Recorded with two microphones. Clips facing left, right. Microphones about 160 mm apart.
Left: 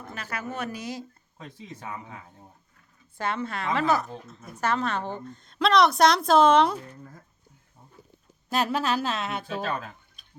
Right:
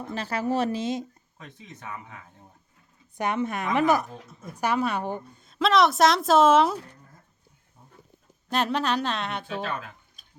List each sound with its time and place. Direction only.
0.1 s speech: 30° right (ahead or behind)
1.4 s speech: 30° left (ahead or behind)
3.2 s a woman's voice: 15° right (ahead or behind)
8.4 s a woman's voice: 5° left (ahead or behind)
9.5 s speech: 40° left (ahead or behind)